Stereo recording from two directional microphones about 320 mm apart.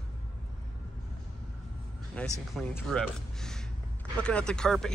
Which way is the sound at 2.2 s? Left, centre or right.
Centre.